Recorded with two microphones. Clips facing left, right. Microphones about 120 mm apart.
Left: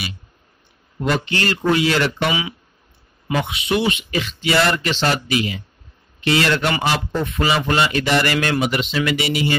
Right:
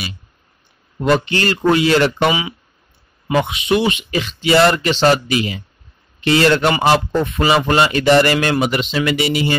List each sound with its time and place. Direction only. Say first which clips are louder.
1.0 s a man's voice: right 5 dB; 35° right (ahead or behind)